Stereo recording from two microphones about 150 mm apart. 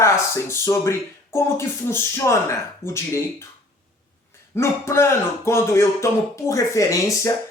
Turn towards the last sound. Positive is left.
turn(degrees=20)  # may be behind; listen again after turning